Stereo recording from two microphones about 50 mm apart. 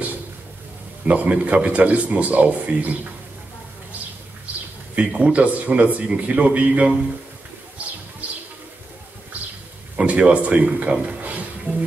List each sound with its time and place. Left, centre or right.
1.0 s speech: right
4.9 s speech: right
7.8 s bird: right
9.9 s speech: right